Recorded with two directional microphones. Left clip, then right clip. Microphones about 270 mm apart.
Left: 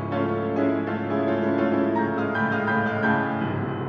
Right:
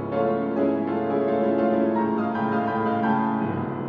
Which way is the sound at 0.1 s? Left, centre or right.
Left.